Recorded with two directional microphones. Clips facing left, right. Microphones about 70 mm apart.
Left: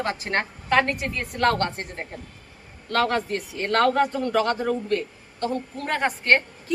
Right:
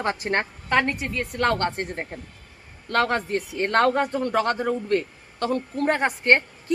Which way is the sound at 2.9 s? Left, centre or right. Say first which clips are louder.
Right 1 dB; right.